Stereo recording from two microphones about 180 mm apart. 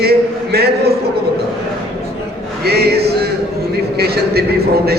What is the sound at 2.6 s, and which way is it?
Speech, 60° right (ahead or behind).